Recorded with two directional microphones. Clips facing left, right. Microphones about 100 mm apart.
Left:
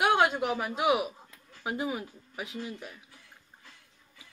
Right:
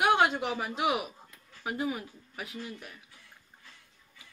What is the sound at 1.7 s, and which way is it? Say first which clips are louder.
Speech: even; 20° left (ahead or behind).